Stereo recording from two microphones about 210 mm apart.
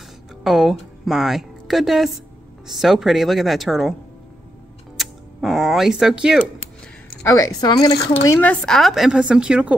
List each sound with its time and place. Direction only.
0.4 s a woman's voice: centre (ahead or behind)
4.9 s speech: centre (ahead or behind)
7.2 s speech: 15° left (ahead or behind)
8.4 s a woman's voice: 5° left (ahead or behind)